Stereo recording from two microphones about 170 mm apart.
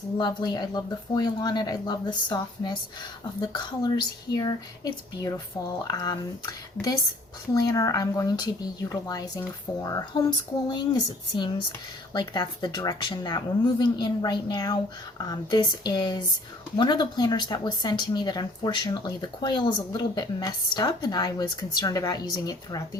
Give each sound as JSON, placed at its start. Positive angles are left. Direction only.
{"t": 0.2, "sound": "speech", "side_deg": 25}